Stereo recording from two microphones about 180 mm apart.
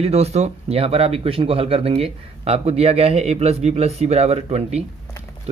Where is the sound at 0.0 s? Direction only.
35° right (ahead or behind).